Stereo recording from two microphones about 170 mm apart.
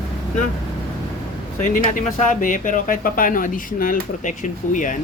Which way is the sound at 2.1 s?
50° left (ahead or behind).